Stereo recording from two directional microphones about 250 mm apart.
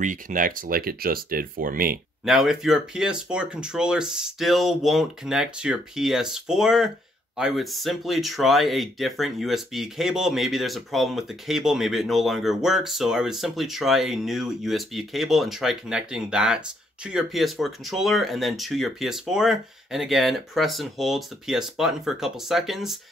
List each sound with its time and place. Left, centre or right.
0.0 s speech: right
2.2 s speech: centre